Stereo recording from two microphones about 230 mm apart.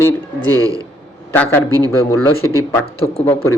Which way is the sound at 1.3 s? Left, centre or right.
Centre.